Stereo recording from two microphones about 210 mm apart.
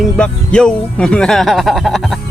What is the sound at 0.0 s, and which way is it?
Speech, 5° left (ahead or behind).